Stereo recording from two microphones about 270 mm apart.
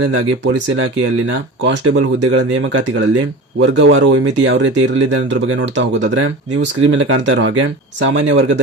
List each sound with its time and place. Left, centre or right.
0.1 s speech: right